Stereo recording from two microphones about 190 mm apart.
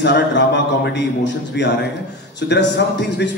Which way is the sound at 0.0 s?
65° left (ahead or behind).